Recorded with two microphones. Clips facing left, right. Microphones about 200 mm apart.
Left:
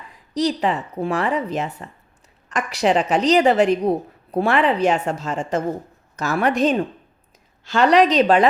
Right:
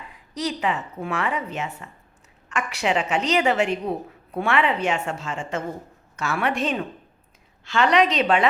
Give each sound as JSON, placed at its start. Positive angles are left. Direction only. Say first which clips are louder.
{"t": 0.3, "sound": "a woman's voice", "louder": "left 5 dB", "side_deg": 35}